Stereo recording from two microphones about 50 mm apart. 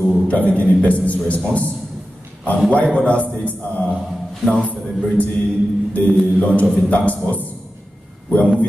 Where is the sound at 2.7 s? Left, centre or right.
Left.